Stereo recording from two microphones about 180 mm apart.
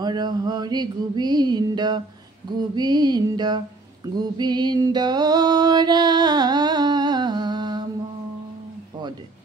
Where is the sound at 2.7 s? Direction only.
25° right (ahead or behind).